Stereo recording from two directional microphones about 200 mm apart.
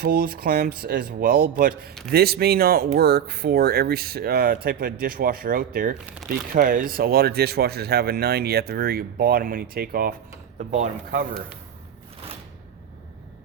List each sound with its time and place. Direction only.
0.0 s speech: 50° right (ahead or behind)